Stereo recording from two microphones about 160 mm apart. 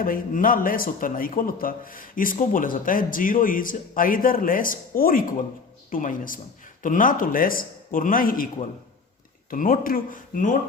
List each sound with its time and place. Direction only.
0.0 s a man's voice: 60° left (ahead or behind)
9.5 s a man's voice: 65° left (ahead or behind)